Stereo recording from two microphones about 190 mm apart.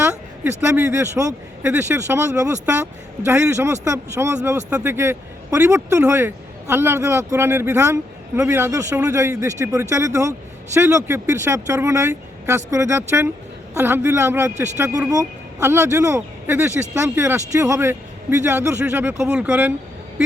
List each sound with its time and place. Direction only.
0.6 s speech: 10° right (ahead or behind)